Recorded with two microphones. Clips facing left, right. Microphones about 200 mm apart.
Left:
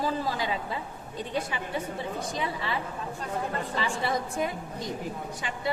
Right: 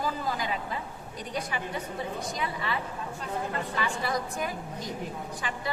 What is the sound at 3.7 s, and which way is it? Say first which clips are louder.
A woman's voice: left 2 dB; 30° left (ahead or behind).